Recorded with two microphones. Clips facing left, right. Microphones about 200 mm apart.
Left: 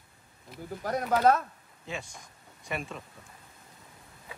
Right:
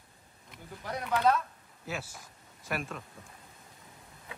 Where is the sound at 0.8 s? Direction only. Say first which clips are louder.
Left 4 dB; 45° left (ahead or behind).